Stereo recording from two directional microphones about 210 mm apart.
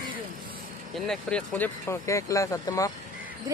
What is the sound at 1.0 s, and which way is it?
Speech, 5° left (ahead or behind).